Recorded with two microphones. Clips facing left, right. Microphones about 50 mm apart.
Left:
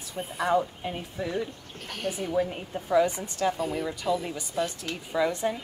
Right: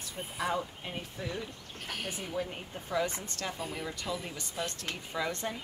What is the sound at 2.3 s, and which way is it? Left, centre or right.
Speech, left.